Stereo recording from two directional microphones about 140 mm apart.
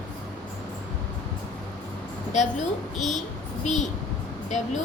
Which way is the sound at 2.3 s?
55° left (ahead or behind).